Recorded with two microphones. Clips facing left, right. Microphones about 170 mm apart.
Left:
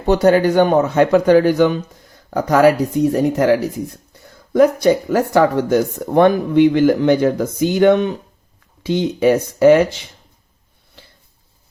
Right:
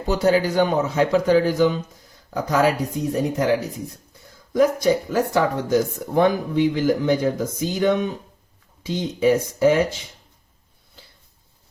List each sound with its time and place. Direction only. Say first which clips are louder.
0.0 s speech: left 6 dB; 65° left (ahead or behind)